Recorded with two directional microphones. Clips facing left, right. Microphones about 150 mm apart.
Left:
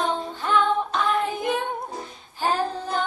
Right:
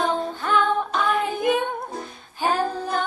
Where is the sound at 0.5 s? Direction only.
5° right (ahead or behind).